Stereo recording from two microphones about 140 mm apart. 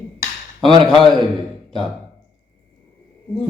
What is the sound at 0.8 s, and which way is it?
Speech, centre (ahead or behind).